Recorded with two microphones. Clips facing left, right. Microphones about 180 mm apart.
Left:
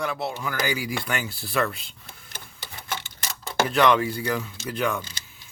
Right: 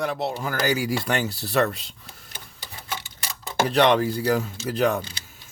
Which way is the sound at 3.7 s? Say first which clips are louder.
Right 2 dB; 35° right (ahead or behind).